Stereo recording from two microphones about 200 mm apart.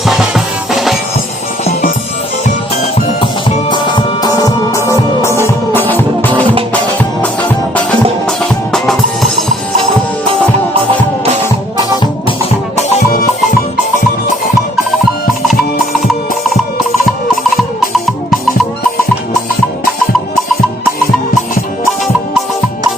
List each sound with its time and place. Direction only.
0.0 s music: centre (ahead or behind)
2.8 s music: 25° left (ahead or behind); by 6.4 s 10° left (ahead or behind)
8.3 s music: centre (ahead or behind)
12.7 s music: 45° left (ahead or behind)
17.6 s music: centre (ahead or behind)